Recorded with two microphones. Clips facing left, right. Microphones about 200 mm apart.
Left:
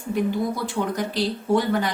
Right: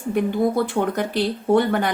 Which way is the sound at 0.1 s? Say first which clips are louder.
Right 4 dB; 55° right (ahead or behind).